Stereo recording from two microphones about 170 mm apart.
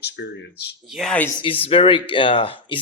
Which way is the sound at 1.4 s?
30° left (ahead or behind).